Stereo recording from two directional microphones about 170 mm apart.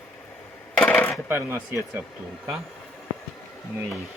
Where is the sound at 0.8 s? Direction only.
10° left (ahead or behind).